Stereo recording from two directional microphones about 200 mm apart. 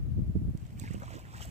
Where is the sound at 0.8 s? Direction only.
35° right (ahead or behind).